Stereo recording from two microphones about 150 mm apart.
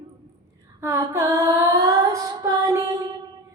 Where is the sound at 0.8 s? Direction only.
20° right (ahead or behind).